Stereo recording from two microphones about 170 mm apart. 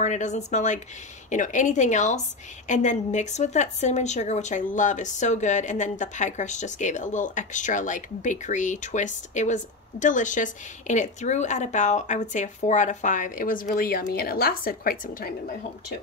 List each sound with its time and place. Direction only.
0.0 s speech: 45° left (ahead or behind)